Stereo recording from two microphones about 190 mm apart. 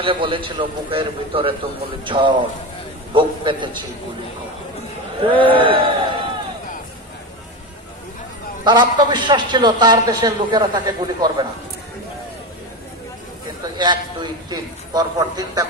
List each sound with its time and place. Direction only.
0.0 s a man's voice: 25° right (ahead or behind)
5.4 s a man's voice: 25° right (ahead or behind)
8.6 s a man's voice: 25° right (ahead or behind)
13.7 s a man's voice: 20° right (ahead or behind)